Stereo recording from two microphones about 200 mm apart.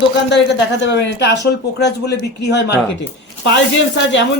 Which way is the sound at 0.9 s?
60° left (ahead or behind).